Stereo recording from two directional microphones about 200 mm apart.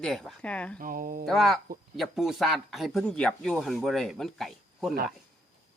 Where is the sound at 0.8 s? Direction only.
45° right (ahead or behind).